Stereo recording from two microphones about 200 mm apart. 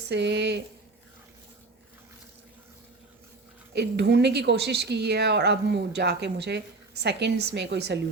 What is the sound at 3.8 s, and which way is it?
A woman's voice, 55° right (ahead or behind).